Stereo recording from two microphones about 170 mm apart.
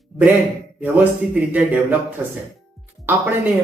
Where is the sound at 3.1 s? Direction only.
10° right (ahead or behind).